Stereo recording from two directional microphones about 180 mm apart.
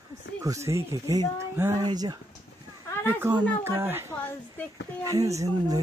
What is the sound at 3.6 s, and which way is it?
Speech, 15° right (ahead or behind).